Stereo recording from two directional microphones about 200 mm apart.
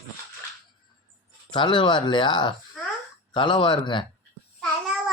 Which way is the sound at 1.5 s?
25° left (ahead or behind).